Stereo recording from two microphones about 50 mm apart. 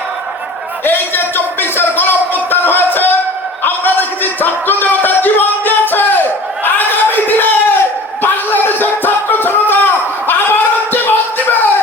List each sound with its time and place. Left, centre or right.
0.9 s speech: left
3.6 s a sound: left
8.2 s music: left